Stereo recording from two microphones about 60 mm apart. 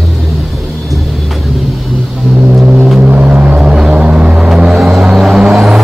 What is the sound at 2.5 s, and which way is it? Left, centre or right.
Vehicle, centre.